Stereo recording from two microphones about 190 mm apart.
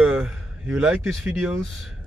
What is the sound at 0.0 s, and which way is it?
Speech, 5° right (ahead or behind).